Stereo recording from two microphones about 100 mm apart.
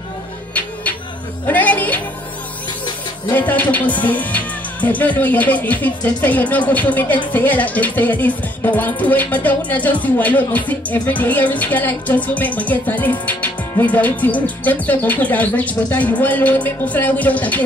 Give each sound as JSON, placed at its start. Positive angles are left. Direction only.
{"t": 1.5, "sound": "music", "side_deg": 15}
{"t": 3.3, "sound": "music", "side_deg": 15}